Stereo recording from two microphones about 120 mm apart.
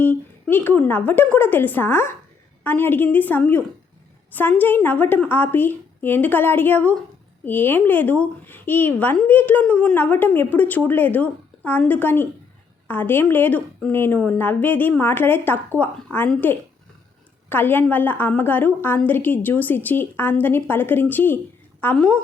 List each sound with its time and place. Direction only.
0.4 s a woman's voice: 15° left (ahead or behind)